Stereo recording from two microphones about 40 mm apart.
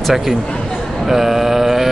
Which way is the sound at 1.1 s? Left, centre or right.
Centre.